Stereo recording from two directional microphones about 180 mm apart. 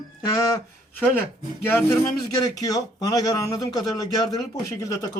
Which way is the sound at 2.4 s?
20° left (ahead or behind).